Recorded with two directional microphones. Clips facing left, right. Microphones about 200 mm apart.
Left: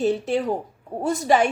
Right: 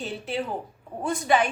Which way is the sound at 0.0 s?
45° left (ahead or behind).